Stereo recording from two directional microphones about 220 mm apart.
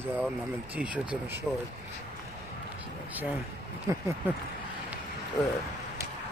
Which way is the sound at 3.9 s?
15° right (ahead or behind).